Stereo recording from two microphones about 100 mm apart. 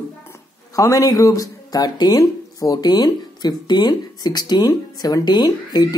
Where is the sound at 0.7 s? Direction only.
35° left (ahead or behind).